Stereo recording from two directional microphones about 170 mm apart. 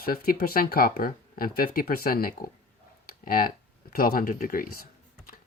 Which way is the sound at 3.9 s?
60° left (ahead or behind).